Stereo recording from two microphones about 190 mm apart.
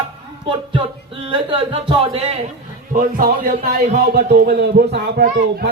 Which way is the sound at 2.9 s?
45° right (ahead or behind).